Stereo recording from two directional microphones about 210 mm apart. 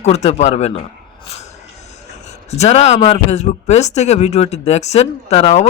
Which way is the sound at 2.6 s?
30° left (ahead or behind).